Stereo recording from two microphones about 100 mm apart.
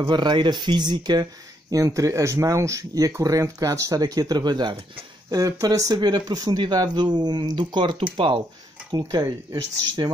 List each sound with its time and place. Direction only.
0.0 s speech: 50° right (ahead or behind)
1.7 s speech: 30° right (ahead or behind)
5.3 s speech: 35° right (ahead or behind); by 8.4 s 60° right (ahead or behind)
9.0 s speech: 30° right (ahead or behind)